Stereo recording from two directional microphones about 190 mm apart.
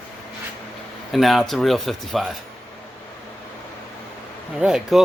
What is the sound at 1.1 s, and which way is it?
Speech, centre (ahead or behind).